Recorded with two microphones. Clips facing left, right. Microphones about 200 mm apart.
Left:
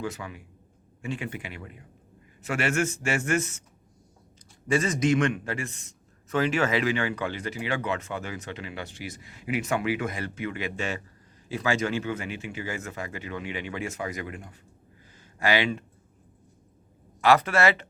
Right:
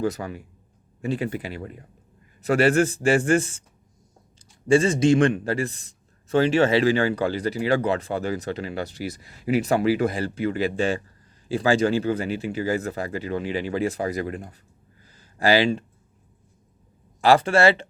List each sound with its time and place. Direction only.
0.0 s a man's voice: 40° right (ahead or behind)
4.7 s a man's voice: 30° right (ahead or behind)
15.1 s a sound: 35° right (ahead or behind)
17.2 s speech: 30° right (ahead or behind)